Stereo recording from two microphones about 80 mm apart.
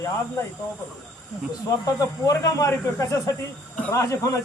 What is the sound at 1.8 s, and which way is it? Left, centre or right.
Speech, left.